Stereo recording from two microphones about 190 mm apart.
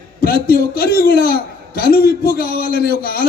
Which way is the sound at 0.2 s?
50° left (ahead or behind).